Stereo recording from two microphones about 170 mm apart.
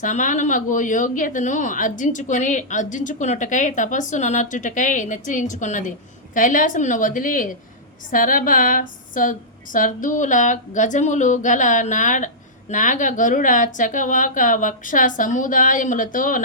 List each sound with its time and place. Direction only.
0.0 s speech: 50° left (ahead or behind)